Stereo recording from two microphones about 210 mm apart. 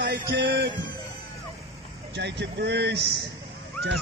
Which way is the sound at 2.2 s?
55° right (ahead or behind).